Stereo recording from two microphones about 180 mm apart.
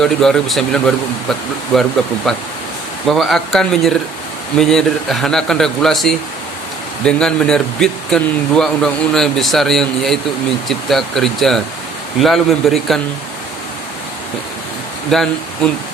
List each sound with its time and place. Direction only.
0.0 s speech: 5° left (ahead or behind)
15.1 s speech: centre (ahead or behind)